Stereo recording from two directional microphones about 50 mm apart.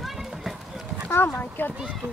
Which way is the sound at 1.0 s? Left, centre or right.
Left.